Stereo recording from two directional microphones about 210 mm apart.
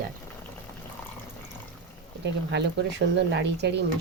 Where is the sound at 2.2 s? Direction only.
55° right (ahead or behind).